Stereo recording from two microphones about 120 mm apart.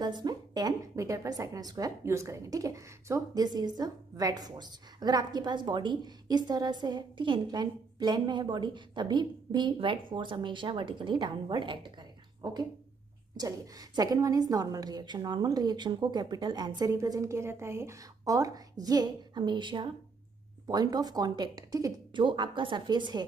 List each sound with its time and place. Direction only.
0.0 s a woman's voice: 35° right (ahead or behind)
22.2 s a woman's voice: 45° right (ahead or behind)